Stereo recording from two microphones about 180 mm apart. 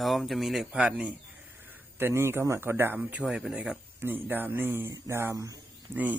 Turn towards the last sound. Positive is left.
turn(degrees=-15)  # may be behind; listen again after turning